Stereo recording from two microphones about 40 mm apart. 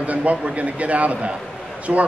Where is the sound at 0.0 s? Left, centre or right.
Right.